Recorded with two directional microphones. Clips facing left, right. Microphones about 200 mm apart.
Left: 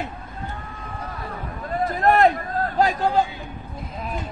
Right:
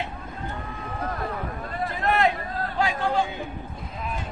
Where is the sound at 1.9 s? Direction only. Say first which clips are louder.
Left 6 dB; 40° left (ahead or behind).